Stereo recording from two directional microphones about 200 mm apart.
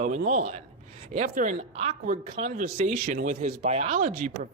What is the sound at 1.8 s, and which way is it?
Speech, 35° right (ahead or behind).